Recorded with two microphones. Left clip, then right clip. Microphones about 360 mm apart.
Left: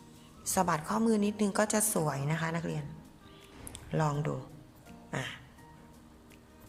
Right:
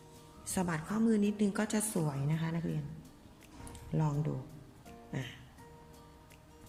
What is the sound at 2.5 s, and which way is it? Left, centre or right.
Speech, left.